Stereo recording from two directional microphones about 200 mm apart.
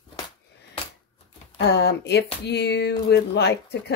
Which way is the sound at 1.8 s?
55° left (ahead or behind).